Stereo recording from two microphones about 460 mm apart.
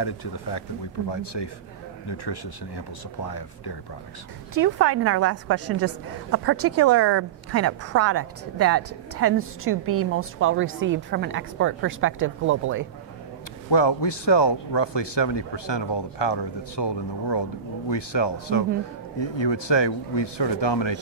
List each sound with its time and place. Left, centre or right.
0.0 s speech: left
4.6 s a woman's voice: right
13.7 s speech: left